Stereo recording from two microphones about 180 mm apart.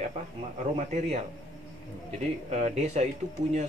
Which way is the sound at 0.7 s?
40° right (ahead or behind).